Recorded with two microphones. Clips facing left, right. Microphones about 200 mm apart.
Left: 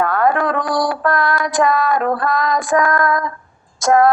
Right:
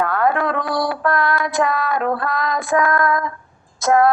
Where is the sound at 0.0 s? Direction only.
45° left (ahead or behind).